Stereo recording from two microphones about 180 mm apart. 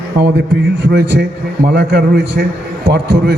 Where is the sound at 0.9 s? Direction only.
70° right (ahead or behind).